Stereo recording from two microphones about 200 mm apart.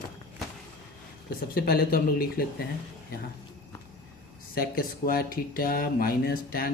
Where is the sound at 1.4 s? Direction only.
50° left (ahead or behind).